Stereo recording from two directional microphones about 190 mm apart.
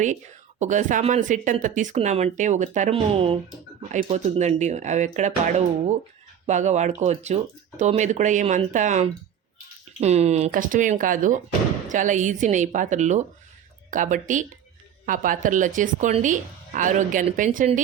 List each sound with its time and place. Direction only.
0.6 s a woman's voice: 40° right (ahead or behind)